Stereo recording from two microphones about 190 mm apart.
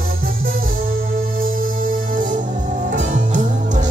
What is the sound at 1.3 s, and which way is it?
Music, 50° right (ahead or behind).